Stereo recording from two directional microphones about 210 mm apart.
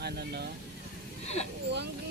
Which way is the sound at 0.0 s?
50° right (ahead or behind).